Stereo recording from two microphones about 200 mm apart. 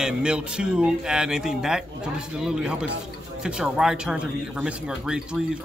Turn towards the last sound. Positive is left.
turn(degrees=-5)  # may be behind; listen again after turning